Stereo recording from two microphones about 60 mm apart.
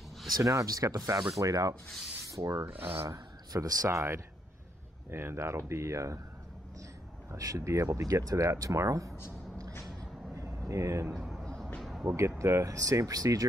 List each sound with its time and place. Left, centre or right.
0.4 s speech: right
1.4 s rub: right
2.2 s speech: right
2.6 s speech: right
3.1 s a man's voice: right
3.9 s speech: right
7.2 s speech: right
10.7 s speech: right
11.1 s a sound: centre
11.4 s music: centre
12.2 s speech: right
12.7 s speech: right